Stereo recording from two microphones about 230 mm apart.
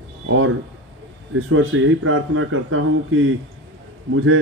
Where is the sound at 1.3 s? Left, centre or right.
Right.